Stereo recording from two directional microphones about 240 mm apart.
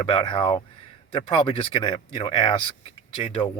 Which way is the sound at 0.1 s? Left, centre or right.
Left.